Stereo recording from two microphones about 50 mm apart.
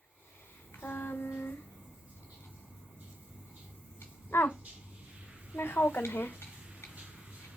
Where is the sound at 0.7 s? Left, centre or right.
Left.